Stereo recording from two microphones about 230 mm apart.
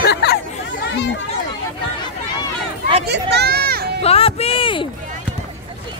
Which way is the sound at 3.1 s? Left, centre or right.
Right.